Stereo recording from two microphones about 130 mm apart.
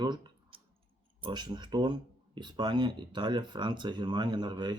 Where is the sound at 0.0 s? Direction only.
35° right (ahead or behind).